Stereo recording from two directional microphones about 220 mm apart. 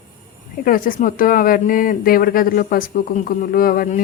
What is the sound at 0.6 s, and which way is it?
A woman's voice, 40° left (ahead or behind).